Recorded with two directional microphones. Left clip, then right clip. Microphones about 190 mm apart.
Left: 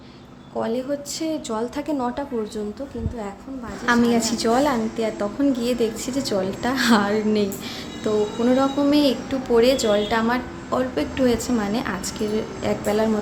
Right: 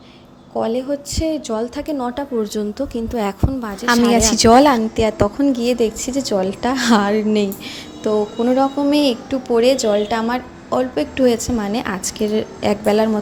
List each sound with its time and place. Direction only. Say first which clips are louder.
0.6 s a woman's voice: right 4 dB; 25° right (ahead or behind)
2.4 s a woman's voice: right 7 dB; 35° right (ahead or behind)
3.2 s a woman's voice: right 10 dB; 50° right (ahead or behind)